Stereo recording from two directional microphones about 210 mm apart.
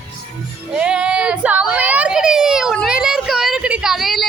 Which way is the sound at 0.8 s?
5° right (ahead or behind).